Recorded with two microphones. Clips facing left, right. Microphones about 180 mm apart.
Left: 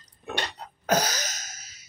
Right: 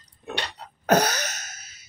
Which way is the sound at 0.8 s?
60° right (ahead or behind).